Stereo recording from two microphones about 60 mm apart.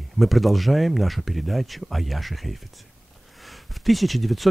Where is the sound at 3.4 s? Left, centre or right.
Centre.